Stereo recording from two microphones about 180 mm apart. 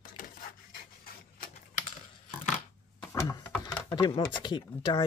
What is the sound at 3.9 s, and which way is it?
Speech, 25° left (ahead or behind).